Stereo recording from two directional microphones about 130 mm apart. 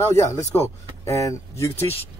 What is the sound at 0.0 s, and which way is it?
Speech, 20° left (ahead or behind).